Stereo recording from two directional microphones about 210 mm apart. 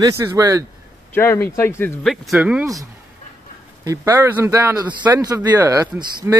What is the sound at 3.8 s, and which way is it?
Speech, 10° right (ahead or behind).